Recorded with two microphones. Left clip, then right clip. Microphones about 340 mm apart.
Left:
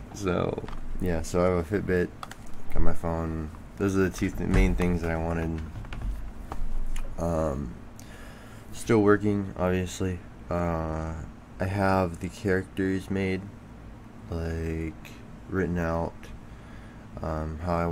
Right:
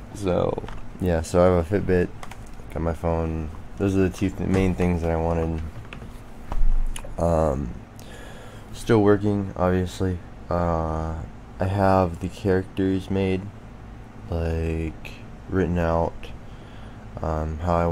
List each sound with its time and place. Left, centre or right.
0.1 s speech: centre
1.3 s speech: centre
7.2 s speech: centre
8.8 s speech: centre
17.2 s speech: centre